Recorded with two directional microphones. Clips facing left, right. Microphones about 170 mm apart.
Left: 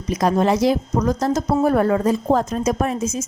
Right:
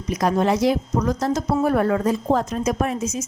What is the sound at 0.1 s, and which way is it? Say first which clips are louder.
A woman's voice: left 2 dB; 30° left (ahead or behind).